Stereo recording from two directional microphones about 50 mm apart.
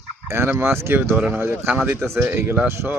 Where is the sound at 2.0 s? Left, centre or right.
Right.